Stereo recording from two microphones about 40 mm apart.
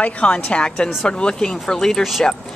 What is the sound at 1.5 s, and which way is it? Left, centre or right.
Speech, centre.